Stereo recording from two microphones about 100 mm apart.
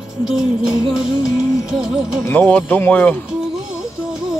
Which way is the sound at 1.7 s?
5° right (ahead or behind).